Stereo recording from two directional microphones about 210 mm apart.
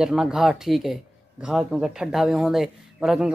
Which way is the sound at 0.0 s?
5° right (ahead or behind).